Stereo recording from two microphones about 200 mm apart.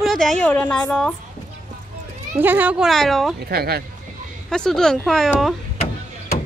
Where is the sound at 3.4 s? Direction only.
50° right (ahead or behind).